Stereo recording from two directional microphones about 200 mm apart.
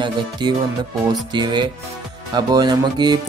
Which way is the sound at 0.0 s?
20° right (ahead or behind).